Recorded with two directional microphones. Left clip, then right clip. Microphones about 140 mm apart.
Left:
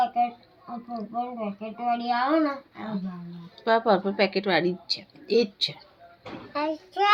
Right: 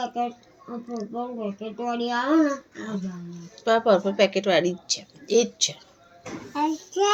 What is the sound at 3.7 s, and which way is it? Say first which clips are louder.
A woman's voice: right 2 dB; 40° left (ahead or behind).